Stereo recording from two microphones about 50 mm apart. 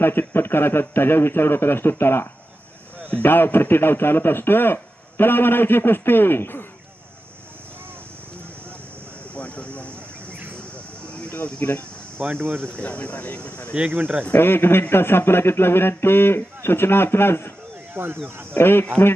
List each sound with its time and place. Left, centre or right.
0.0 s a man's voice: left
9.3 s speech: left
10.2 s a sound: right
11.1 s a sound: left
11.6 s a man's voice: left
12.1 s speech: right
12.8 s speech: left
13.9 s speech: right
14.3 s a man's voice: left
17.9 s speech: right
18.5 s a man's voice: left